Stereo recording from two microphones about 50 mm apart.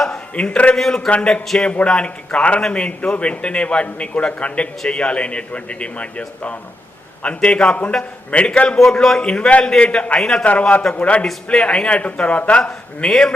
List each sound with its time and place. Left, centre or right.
0.3 s a man's voice: left
0.8 s a man's voice: centre
1.1 s a man's voice: left
8.8 s a man's voice: centre